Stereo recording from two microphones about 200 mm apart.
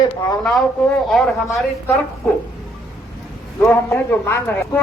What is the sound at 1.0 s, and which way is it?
Speech, centre (ahead or behind).